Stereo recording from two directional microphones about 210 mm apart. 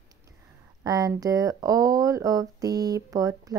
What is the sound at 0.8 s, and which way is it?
Speech, 15° right (ahead or behind).